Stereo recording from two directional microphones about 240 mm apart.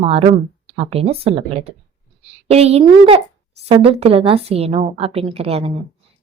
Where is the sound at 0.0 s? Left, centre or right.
Right.